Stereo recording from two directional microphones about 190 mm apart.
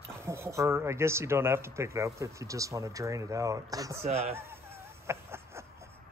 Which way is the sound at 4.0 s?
35° right (ahead or behind).